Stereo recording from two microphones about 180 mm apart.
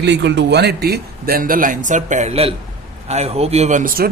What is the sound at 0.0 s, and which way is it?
Speech, 75° right (ahead or behind).